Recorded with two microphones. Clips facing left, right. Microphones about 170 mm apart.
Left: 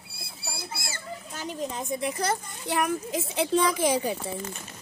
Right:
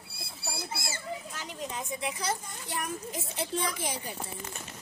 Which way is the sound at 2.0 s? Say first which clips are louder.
Left 5 dB; 50° left (ahead or behind).